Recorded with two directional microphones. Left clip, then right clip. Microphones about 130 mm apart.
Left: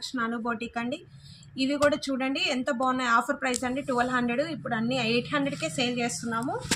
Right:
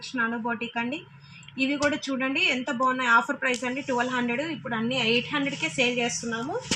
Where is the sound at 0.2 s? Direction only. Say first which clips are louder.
Right 3 dB; 20° left (ahead or behind).